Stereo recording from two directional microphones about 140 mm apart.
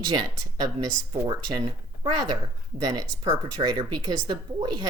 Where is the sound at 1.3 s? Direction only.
35° right (ahead or behind).